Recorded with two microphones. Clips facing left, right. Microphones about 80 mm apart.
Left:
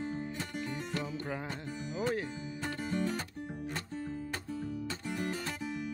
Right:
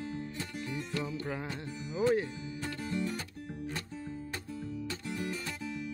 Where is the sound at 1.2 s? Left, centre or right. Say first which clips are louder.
Right 1 dB; centre.